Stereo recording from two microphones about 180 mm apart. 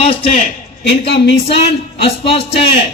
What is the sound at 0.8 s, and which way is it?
Speech, 70° left (ahead or behind).